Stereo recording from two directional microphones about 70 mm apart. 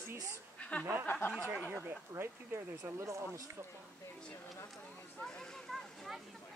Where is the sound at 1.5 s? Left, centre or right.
Right.